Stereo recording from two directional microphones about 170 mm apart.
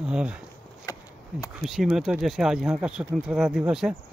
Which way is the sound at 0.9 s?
20° left (ahead or behind).